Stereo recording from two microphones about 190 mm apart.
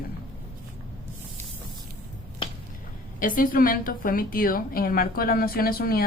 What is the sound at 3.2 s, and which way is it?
A woman's voice, 45° left (ahead or behind).